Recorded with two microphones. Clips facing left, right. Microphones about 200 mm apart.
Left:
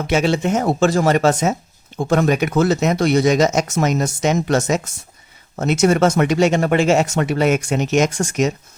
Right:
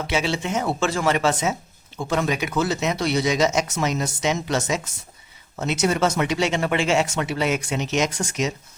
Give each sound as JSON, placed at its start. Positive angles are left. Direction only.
{"t": 0.1, "sound": "speech", "side_deg": 45}